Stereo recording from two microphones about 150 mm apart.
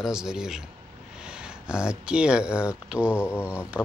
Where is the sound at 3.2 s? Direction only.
15° left (ahead or behind).